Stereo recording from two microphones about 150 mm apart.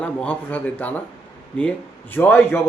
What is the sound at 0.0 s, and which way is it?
Speech, 10° left (ahead or behind).